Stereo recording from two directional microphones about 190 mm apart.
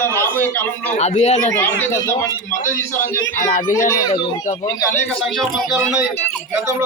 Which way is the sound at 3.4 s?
40° left (ahead or behind).